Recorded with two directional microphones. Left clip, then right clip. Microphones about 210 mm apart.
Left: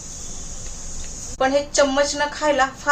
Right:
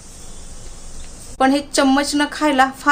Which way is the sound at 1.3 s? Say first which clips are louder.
Right 1 dB; 50° right (ahead or behind).